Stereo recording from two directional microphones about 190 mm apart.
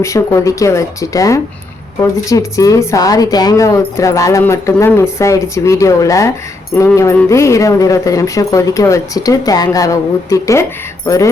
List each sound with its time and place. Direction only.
0.0 s speech: 15° left (ahead or behind)